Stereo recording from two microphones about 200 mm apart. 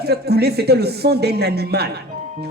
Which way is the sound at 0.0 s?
55° right (ahead or behind).